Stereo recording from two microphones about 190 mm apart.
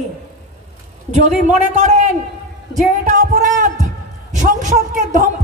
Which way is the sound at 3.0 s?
40° right (ahead or behind).